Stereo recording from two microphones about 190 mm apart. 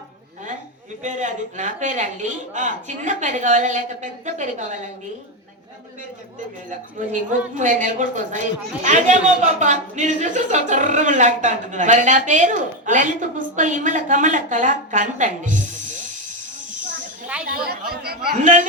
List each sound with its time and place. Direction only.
1.0 s speech: 40° right (ahead or behind)
6.7 s speech: 40° right (ahead or behind)
17.4 s speech: 50° right (ahead or behind)